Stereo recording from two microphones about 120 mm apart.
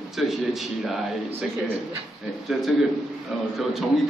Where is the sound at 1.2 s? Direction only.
15° right (ahead or behind).